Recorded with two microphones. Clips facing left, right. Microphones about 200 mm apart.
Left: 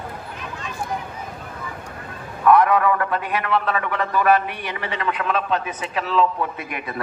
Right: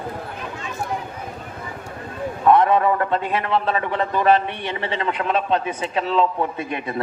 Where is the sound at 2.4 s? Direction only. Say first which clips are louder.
Even; 25° right (ahead or behind).